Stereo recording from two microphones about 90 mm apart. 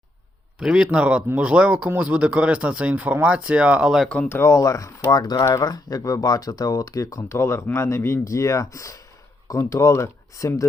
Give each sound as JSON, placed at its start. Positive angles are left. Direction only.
{"t": 0.6, "sound": "speech", "side_deg": -5}
{"t": 4.3, "sound": "speech", "side_deg": 30}